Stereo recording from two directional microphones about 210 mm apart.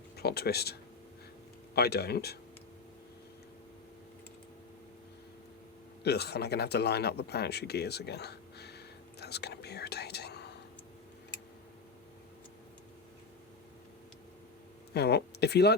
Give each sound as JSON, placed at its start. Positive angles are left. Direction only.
{"t": 0.2, "sound": "speech", "side_deg": 50}
{"t": 6.0, "sound": "a sound", "side_deg": 50}
{"t": 14.9, "sound": "speech", "side_deg": 50}